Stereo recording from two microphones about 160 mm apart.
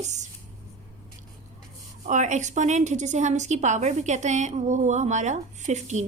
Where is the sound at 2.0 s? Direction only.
50° right (ahead or behind).